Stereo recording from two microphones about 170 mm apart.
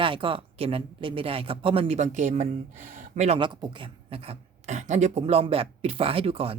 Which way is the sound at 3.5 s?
25° right (ahead or behind).